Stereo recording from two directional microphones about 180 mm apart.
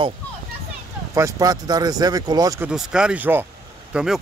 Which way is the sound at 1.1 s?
20° right (ahead or behind).